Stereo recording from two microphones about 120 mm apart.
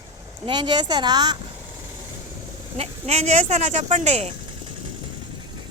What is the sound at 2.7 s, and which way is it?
Speech, 65° right (ahead or behind).